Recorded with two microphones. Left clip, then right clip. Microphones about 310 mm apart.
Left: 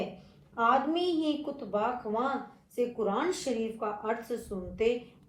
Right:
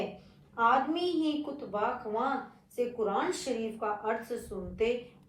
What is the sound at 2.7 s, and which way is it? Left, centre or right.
A woman's voice, left.